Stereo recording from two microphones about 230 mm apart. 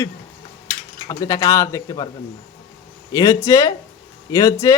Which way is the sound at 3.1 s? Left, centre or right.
Centre.